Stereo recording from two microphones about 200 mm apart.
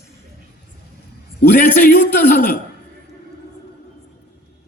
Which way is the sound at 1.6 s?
45° left (ahead or behind).